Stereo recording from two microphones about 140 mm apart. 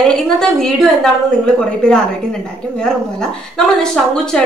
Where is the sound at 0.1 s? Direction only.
5° left (ahead or behind).